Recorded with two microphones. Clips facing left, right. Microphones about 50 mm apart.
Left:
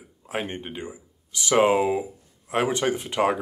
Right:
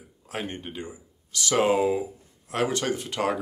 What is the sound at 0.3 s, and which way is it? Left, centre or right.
Speech, centre.